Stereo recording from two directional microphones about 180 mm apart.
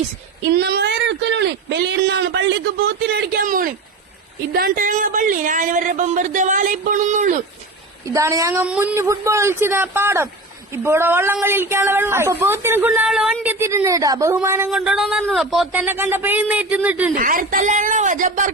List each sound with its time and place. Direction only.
0.5 s speech: 65° right (ahead or behind); by 2.5 s 85° right
3.1 s speech: 60° right (ahead or behind); by 7.4 s 45° right (ahead or behind)
8.0 s a woman's voice: 15° right (ahead or behind)
14.7 s a woman's voice: 5° right (ahead or behind)
17.2 s speech: 50° right (ahead or behind)